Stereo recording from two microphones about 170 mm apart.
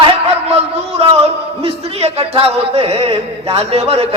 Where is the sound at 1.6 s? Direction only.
35° right (ahead or behind).